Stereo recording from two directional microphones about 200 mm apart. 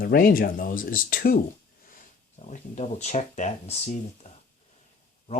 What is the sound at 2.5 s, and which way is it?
Speech, 35° left (ahead or behind).